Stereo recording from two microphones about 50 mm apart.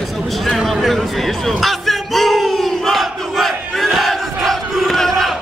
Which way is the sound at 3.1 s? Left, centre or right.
Centre.